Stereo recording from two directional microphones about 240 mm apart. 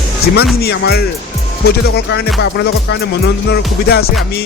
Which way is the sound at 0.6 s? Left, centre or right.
Left.